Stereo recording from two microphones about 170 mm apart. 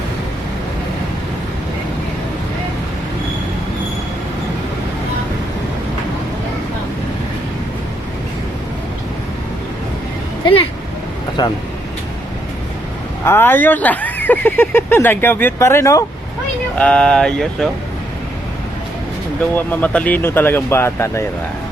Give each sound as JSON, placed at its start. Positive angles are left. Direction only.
{"t": 10.4, "sound": "vehicle", "side_deg": 30}
{"t": 11.4, "sound": "speech", "side_deg": 25}
{"t": 13.2, "sound": "speech", "side_deg": 10}
{"t": 16.7, "sound": "speech", "side_deg": 5}
{"t": 19.4, "sound": "speech", "side_deg": 10}